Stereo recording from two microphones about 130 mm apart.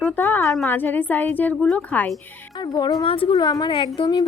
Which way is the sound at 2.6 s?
35° left (ahead or behind).